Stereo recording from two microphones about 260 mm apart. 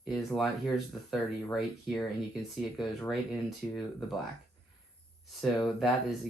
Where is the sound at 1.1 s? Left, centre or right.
Centre.